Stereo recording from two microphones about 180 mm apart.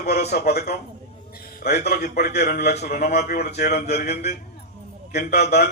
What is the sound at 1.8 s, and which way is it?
Speech, 65° left (ahead or behind).